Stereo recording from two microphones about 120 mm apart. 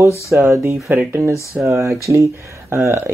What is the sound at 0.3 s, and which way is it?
Speech, 25° right (ahead or behind).